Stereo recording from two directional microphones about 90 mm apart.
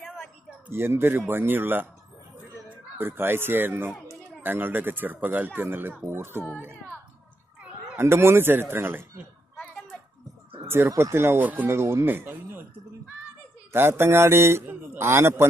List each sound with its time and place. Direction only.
0.7 s speech: 25° right (ahead or behind)
8.0 s speech: 30° right (ahead or behind)
10.9 s speech: 30° right (ahead or behind)
13.7 s a man's voice: 25° right (ahead or behind)